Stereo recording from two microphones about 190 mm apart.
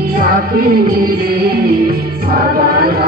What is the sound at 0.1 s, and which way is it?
Music, 50° right (ahead or behind).